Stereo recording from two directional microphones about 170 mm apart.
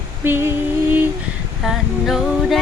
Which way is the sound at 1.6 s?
Centre (ahead or behind).